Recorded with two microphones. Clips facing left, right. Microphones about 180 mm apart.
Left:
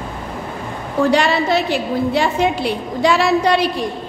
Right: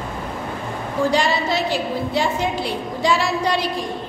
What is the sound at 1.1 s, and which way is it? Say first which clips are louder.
A woman's voice: left 5 dB; 65° left (ahead or behind).